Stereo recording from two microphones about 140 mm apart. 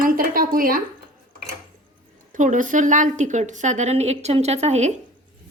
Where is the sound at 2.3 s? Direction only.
65° right (ahead or behind).